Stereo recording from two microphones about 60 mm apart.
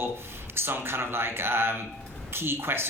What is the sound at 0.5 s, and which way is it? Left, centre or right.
Speech, right.